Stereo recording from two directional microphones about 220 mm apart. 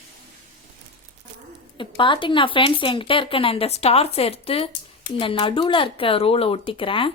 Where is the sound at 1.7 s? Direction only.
20° left (ahead or behind).